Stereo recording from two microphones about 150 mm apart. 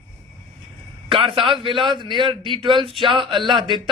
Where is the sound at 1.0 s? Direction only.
35° right (ahead or behind).